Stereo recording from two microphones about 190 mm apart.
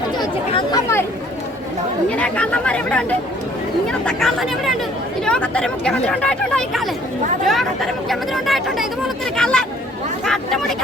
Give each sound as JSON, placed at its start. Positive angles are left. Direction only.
{"t": 0.2, "sound": "speech", "side_deg": 20}
{"t": 2.0, "sound": "speech", "side_deg": 5}